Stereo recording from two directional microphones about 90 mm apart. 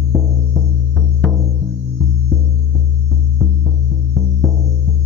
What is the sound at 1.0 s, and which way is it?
Music, 10° left (ahead or behind).